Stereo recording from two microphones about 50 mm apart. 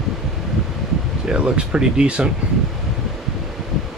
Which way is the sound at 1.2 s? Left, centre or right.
Right.